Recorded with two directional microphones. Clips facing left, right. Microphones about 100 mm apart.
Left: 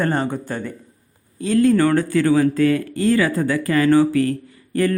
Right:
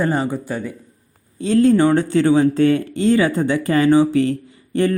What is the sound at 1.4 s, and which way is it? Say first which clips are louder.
Speech: right 2 dB; 30° right (ahead or behind).